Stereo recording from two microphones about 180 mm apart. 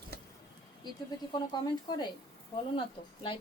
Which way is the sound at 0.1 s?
60° right (ahead or behind).